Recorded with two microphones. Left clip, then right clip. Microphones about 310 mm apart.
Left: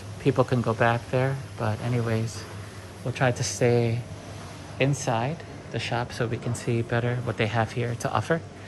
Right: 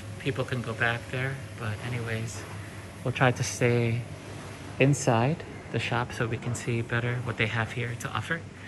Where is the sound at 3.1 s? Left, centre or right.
Centre.